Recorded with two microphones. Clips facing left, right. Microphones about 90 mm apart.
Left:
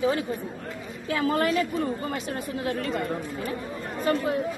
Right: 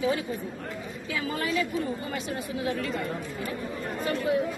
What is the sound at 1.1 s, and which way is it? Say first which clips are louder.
Speech: left 5 dB; 50° left (ahead or behind).